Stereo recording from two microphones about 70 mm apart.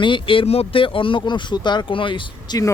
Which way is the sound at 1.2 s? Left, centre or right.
Left.